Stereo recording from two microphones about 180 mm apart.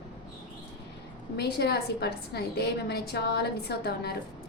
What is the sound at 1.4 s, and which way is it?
A woman's voice, 65° left (ahead or behind).